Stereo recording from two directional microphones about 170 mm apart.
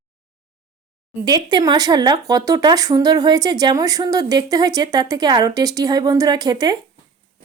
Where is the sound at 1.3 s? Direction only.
25° right (ahead or behind).